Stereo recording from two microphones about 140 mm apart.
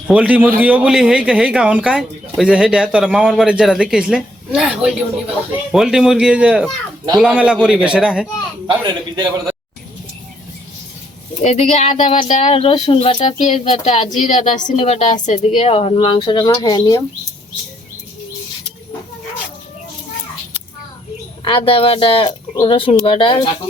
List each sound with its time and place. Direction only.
0.1 s speech: 10° right (ahead or behind)
8.6 s a man's voice: 35° right (ahead or behind)
11.4 s a woman's voice: 50° left (ahead or behind); by 17.0 s 25° left (ahead or behind)
21.4 s speech: 40° left (ahead or behind)